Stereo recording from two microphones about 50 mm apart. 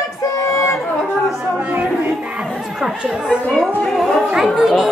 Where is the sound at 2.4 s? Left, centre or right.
Centre.